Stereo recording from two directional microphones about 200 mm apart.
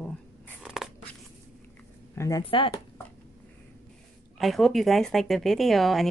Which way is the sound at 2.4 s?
25° left (ahead or behind).